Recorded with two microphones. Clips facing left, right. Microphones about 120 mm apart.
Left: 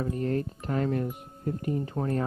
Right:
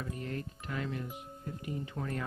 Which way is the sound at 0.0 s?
40° left (ahead or behind).